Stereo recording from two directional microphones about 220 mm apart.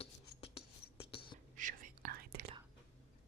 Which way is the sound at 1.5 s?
35° right (ahead or behind).